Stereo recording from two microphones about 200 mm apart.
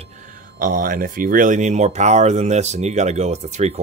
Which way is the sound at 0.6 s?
45° right (ahead or behind).